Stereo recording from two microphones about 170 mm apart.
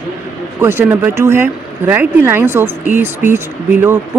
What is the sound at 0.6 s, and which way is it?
Speech, 15° right (ahead or behind).